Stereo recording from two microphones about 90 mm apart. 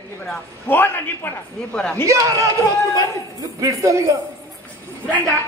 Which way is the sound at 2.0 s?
35° right (ahead or behind).